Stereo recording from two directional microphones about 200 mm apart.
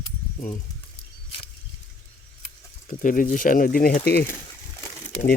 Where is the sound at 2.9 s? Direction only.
40° left (ahead or behind).